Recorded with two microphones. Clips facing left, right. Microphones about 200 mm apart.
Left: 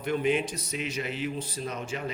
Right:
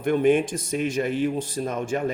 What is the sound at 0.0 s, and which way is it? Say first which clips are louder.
Speech: right 7 dB; 50° right (ahead or behind).